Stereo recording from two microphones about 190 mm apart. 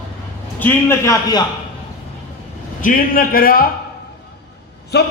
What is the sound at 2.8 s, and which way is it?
Speech, 45° left (ahead or behind).